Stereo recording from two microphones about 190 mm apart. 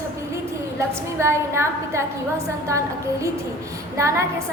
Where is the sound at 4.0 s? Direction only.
15° right (ahead or behind).